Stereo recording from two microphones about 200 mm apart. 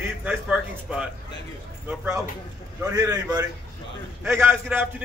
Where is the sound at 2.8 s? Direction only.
20° right (ahead or behind).